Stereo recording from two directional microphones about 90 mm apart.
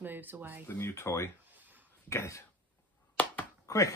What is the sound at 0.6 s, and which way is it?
Speech, 30° left (ahead or behind).